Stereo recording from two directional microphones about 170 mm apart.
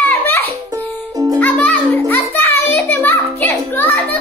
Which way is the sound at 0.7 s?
20° right (ahead or behind).